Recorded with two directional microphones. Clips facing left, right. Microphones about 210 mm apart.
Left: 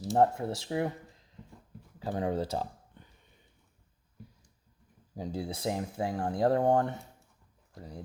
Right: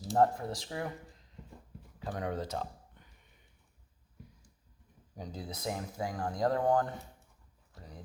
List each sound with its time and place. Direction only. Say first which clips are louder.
0.2 s speech: left 2 dB; 25° left (ahead or behind)
2.0 s speech: left 5 dB; 30° left (ahead or behind)
5.1 s speech: left 7 dB; 30° left (ahead or behind)